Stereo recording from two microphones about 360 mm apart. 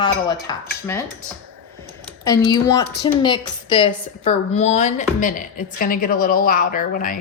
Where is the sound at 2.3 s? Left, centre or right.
Centre.